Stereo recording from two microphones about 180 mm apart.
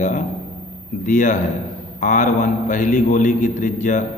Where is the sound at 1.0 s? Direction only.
45° left (ahead or behind).